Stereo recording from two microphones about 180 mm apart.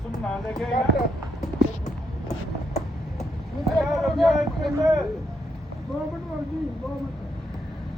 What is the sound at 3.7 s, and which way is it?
Speech, centre (ahead or behind).